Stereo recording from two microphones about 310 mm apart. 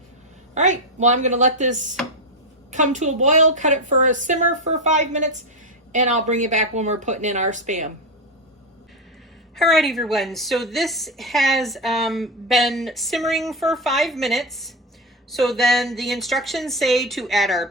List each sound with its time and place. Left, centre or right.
0.5 s a woman's voice: right
9.6 s a woman's voice: centre